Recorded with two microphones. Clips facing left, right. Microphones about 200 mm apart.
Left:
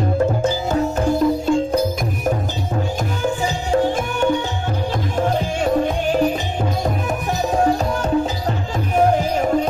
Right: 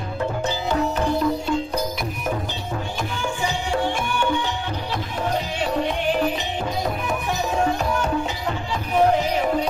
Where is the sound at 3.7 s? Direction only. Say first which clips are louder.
Left 7 dB; 40° left (ahead or behind).